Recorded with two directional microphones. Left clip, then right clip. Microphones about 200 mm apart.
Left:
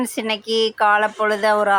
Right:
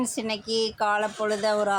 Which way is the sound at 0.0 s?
20° left (ahead or behind).